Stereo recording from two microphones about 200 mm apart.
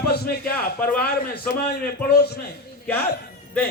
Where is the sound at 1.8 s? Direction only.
55° left (ahead or behind).